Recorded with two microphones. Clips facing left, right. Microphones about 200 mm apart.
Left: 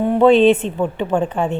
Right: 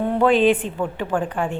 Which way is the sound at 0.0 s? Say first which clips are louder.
Left 5 dB; 20° left (ahead or behind).